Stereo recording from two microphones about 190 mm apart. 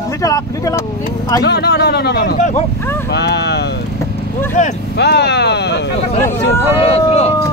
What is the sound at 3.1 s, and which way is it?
Speech, 60° left (ahead or behind).